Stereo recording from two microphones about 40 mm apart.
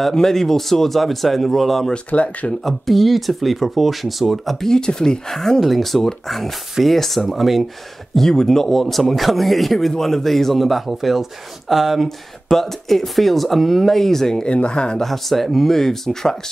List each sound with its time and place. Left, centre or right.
0.1 s speech: centre
2.1 s speech: left
2.6 s speech: centre
4.6 s speech: centre
8.1 s speech: centre
12.4 s speech: centre
14.5 s speech: left
15.0 s speech: centre